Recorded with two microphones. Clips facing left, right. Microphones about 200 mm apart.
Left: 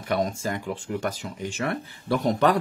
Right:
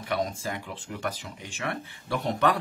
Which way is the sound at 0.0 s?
45° left (ahead or behind).